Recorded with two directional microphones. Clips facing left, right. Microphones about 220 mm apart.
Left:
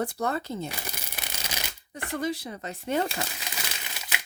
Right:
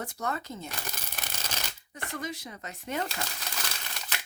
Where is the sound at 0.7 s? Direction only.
10° left (ahead or behind).